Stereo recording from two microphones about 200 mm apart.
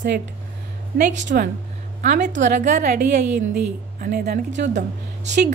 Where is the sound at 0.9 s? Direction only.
60° right (ahead or behind).